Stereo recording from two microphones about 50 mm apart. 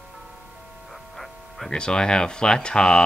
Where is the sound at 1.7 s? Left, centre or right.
Centre.